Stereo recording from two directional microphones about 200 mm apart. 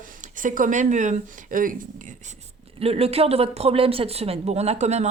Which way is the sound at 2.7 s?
30° right (ahead or behind).